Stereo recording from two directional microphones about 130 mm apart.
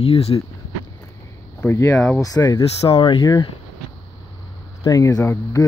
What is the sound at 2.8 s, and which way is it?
Speech, 40° left (ahead or behind).